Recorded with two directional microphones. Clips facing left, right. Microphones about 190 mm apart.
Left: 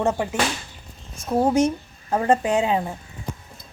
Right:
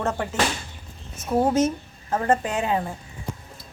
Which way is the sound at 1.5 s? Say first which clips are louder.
Left 2 dB; 15° left (ahead or behind).